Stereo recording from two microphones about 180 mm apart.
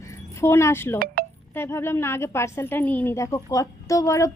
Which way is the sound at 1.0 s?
55° right (ahead or behind).